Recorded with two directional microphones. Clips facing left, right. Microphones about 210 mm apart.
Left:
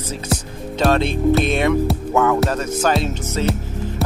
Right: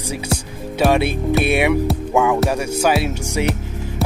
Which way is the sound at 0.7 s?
10° right (ahead or behind).